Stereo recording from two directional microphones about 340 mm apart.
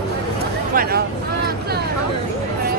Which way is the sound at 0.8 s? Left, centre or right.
Right.